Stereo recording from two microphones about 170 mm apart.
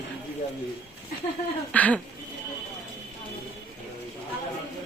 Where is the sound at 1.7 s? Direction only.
10° left (ahead or behind).